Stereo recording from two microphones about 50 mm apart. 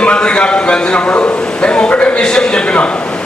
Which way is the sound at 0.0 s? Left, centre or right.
Left.